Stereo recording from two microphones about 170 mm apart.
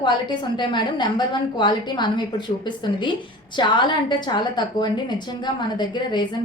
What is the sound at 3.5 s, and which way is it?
A woman's voice, 25° left (ahead or behind).